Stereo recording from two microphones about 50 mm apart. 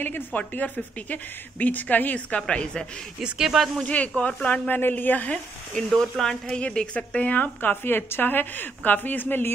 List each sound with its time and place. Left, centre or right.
0.0 s a woman's voice: left
2.4 s a woman's voice: centre
3.2 s speech: centre
3.8 s a woman's voice: left
5.9 s speech: centre
6.6 s a woman's voice: left